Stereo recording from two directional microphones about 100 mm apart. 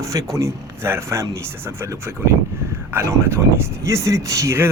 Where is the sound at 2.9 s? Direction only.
25° right (ahead or behind).